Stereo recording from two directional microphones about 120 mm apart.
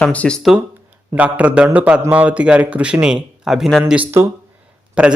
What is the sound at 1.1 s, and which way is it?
Speech, 10° right (ahead or behind).